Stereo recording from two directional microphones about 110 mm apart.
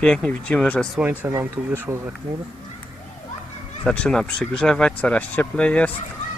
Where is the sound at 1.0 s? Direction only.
20° right (ahead or behind).